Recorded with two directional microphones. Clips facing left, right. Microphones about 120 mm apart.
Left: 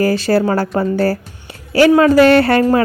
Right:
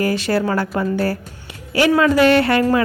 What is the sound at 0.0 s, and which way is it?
A woman's voice, 35° left (ahead or behind).